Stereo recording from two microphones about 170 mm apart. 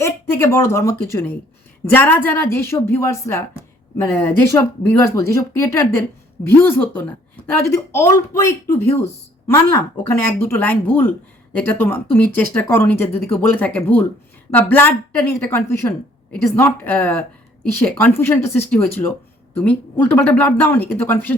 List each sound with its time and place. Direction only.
0.0 s speech: 15° left (ahead or behind)